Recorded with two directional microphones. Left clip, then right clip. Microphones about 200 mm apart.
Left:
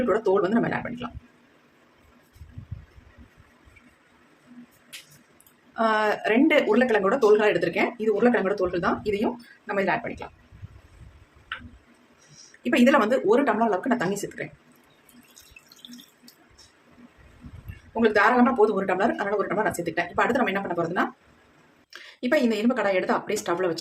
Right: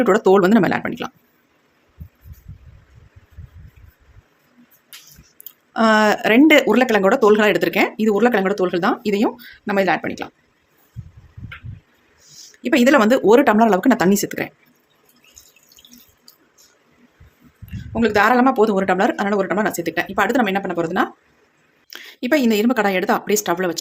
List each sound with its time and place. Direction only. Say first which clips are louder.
0.1 s speech: right 9 dB; 55° right (ahead or behind)
5.7 s speech: right 8 dB; 45° right (ahead or behind)
12.6 s speech: right 6 dB; 45° right (ahead or behind)
18.0 s speech: right 5 dB; 50° right (ahead or behind)